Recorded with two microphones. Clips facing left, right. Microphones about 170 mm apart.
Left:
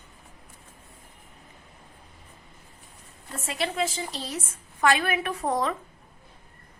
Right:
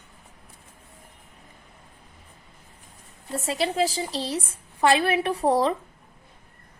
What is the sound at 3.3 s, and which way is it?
A woman's voice, 35° right (ahead or behind).